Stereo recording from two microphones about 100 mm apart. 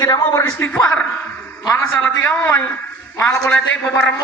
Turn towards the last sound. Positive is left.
turn(degrees=15)  # may be behind; listen again after turning